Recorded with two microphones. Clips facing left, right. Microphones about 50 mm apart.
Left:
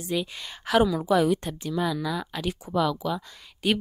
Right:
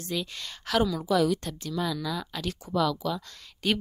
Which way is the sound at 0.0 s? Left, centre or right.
Centre.